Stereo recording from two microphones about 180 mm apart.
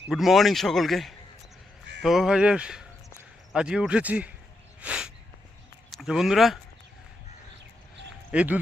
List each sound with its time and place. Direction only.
0.1 s speech: centre (ahead or behind)
4.8 s a sound: 5° right (ahead or behind)
6.0 s speech: 5° right (ahead or behind)
8.3 s speech: 5° right (ahead or behind)